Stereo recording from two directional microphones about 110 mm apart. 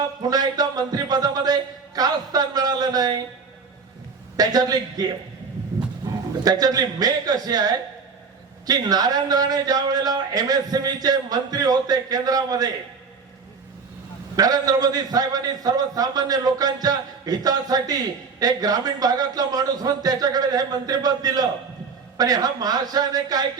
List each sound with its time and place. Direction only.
0.2 s a man's voice: 35° right (ahead or behind)
2.0 s a sound: 35° right (ahead or behind)
4.4 s a man's voice: 35° right (ahead or behind)
6.0 s a sound: 40° right (ahead or behind)
6.4 s a man's voice: 35° right (ahead or behind)
14.3 s a man's voice: 35° right (ahead or behind)